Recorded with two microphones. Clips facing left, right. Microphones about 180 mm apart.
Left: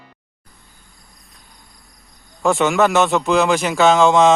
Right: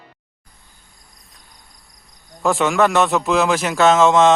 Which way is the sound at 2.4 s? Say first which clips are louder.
Left 1 dB; centre (ahead or behind).